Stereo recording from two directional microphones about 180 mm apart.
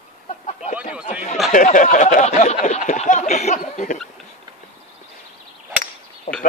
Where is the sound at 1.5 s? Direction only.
45° left (ahead or behind).